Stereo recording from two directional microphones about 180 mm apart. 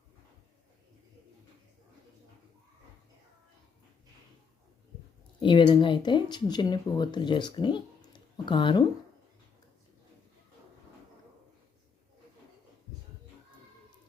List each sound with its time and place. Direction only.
5.4 s speech: 25° left (ahead or behind)